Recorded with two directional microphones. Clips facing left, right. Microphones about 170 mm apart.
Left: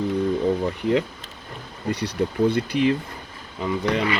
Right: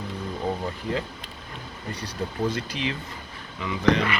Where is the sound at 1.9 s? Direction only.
70° left (ahead or behind); by 2.9 s 55° left (ahead or behind).